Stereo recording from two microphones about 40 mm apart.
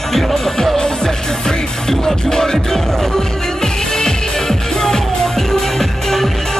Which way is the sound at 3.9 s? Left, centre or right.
Centre.